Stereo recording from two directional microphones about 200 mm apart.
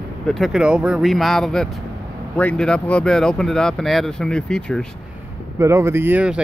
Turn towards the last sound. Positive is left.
turn(degrees=-5)  # may be behind; listen again after turning